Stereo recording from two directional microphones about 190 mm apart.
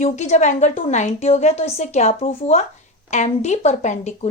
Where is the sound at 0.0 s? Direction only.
40° left (ahead or behind).